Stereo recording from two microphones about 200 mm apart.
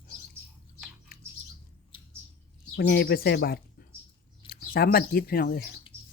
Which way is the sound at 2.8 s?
50° left (ahead or behind).